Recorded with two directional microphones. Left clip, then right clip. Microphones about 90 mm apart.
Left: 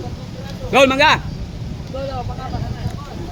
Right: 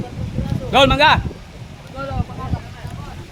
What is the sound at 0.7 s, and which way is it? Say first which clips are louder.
Speech: even; 40° right (ahead or behind).